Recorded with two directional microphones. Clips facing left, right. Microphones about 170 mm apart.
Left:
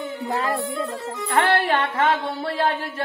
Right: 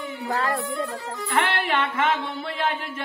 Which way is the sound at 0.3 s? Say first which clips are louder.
Left 1 dB; 25° left (ahead or behind).